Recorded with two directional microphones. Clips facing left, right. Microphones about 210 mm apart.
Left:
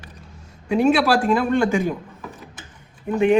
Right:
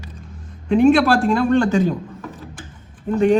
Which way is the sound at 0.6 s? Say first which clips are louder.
Right 4 dB; centre (ahead or behind).